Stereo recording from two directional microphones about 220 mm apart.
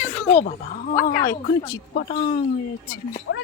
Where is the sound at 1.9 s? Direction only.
40° left (ahead or behind).